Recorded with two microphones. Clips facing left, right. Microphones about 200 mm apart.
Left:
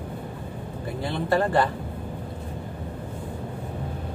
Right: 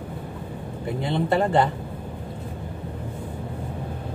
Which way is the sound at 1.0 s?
20° right (ahead or behind).